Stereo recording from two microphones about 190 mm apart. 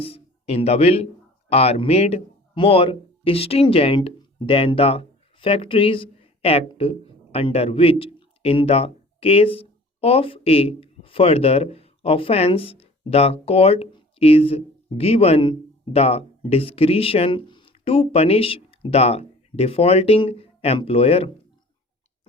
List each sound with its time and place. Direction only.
0.0 s speech: 30° left (ahead or behind)